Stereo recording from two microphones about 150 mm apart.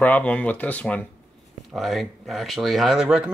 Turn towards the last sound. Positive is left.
turn(degrees=-5)  # may be behind; listen again after turning